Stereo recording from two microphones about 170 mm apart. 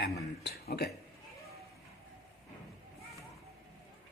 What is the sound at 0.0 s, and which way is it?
Speech, 70° left (ahead or behind).